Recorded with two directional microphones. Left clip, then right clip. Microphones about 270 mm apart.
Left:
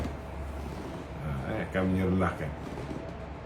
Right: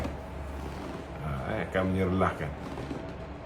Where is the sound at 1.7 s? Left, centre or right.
Centre.